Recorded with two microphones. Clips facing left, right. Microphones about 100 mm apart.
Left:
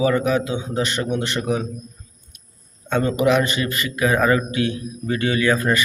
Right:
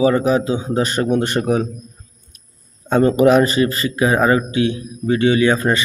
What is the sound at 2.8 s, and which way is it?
A man's voice, 40° right (ahead or behind).